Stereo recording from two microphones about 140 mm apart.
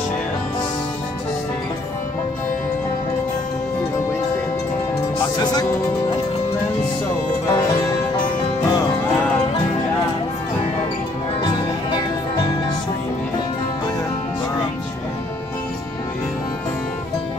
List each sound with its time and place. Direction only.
5.4 s speech: 30° left (ahead or behind)
8.6 s music: 25° left (ahead or behind)